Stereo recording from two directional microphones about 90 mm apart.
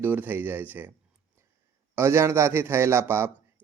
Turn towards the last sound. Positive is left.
turn(degrees=-30)  # may be behind; listen again after turning